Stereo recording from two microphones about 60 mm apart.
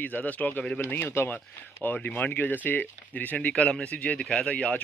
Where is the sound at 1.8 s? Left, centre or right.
Left.